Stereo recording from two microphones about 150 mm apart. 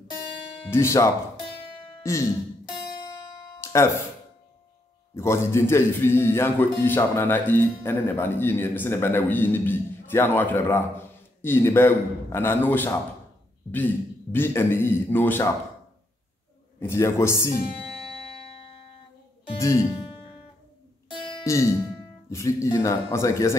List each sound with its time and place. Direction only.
0.7 s speech: 20° left (ahead or behind)
3.6 s music: 20° left (ahead or behind)
5.1 s a man's voice: 15° left (ahead or behind)
14.3 s a man's voice: 15° left (ahead or behind)
16.8 s speech: 15° left (ahead or behind)
19.6 s speech: 20° left (ahead or behind)
21.5 s speech: 20° left (ahead or behind)